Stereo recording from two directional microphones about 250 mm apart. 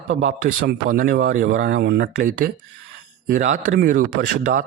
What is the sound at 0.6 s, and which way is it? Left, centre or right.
Speech, right.